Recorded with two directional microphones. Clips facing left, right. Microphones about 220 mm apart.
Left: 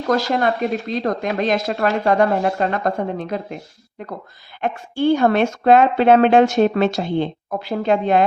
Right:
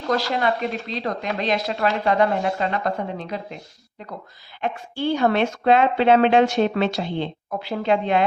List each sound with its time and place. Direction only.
0.1 s speech: 45° left (ahead or behind)